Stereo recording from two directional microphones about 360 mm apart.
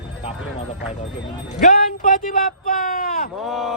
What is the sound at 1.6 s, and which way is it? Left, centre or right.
Speech, left.